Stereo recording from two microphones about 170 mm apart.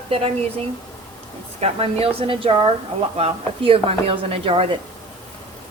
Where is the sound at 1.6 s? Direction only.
35° right (ahead or behind).